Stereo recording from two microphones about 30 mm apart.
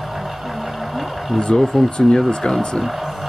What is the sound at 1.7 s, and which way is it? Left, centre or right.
Speech, centre.